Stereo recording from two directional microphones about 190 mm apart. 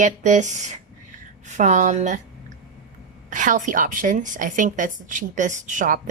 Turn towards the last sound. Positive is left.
turn(degrees=-45)  # may be behind; listen again after turning